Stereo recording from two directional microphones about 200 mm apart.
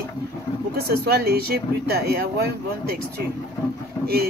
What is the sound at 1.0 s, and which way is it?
Speech, 50° right (ahead or behind).